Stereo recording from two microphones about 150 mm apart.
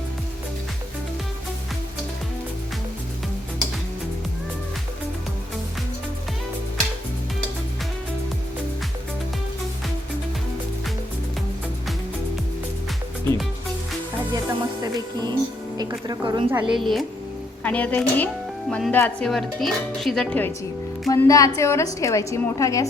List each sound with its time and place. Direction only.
14.3 s speech: 25° right (ahead or behind)
16.5 s speech: 10° right (ahead or behind)
21.1 s a woman's voice: 20° left (ahead or behind)